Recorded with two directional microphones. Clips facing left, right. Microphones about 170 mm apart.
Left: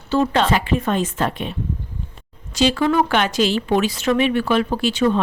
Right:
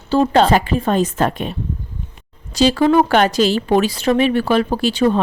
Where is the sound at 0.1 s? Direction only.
35° right (ahead or behind).